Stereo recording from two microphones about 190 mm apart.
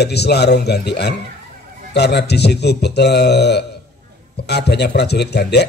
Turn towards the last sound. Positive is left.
turn(degrees=60)  # may be behind; listen again after turning